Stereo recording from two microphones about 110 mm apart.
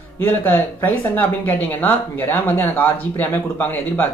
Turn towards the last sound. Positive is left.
turn(degrees=15)  # may be behind; listen again after turning